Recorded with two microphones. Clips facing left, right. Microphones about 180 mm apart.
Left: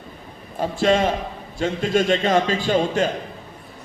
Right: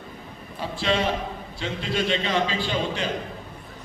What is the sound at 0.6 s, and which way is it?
A man's voice, 45° left (ahead or behind).